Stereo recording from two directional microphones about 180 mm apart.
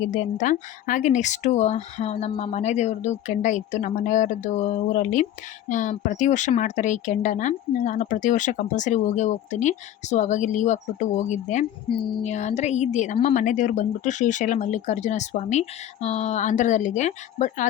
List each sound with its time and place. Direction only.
0.1 s a woman's voice: 45° left (ahead or behind)